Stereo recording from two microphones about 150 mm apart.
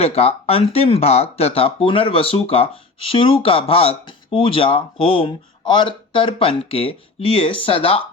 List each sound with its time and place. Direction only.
0.0 s speech: 45° left (ahead or behind)